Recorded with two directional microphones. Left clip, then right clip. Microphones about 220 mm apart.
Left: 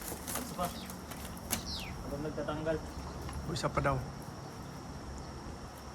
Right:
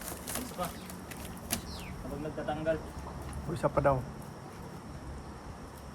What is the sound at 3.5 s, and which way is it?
Speech, 10° right (ahead or behind).